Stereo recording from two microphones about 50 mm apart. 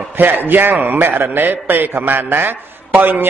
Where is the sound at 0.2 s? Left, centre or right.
Right.